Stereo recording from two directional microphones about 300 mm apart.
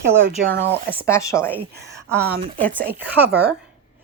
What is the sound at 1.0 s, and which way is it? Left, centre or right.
Speech, centre.